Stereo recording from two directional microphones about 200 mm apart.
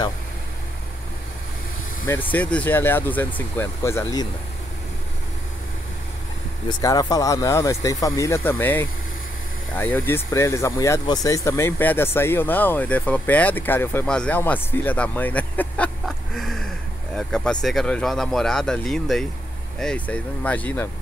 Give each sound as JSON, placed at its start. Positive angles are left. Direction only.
{"t": 2.3, "sound": "speech", "side_deg": 5}
{"t": 6.7, "sound": "speech", "side_deg": 20}